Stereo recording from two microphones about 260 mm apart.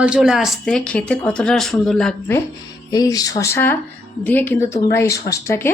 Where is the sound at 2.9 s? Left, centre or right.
Centre.